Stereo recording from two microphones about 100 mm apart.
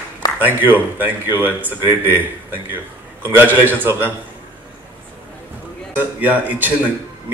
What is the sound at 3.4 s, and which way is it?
Speech, 20° right (ahead or behind).